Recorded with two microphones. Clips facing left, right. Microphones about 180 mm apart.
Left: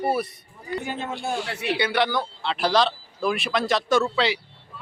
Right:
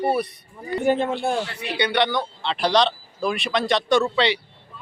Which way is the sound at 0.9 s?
55° right (ahead or behind).